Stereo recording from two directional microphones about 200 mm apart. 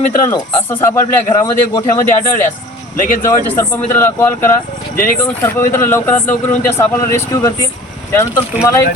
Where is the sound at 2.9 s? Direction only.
45° left (ahead or behind).